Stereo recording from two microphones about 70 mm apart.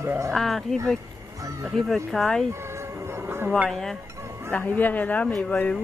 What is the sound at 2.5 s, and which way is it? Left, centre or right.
Music, right.